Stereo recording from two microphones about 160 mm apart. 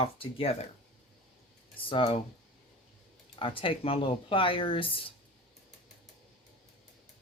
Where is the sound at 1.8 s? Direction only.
35° left (ahead or behind).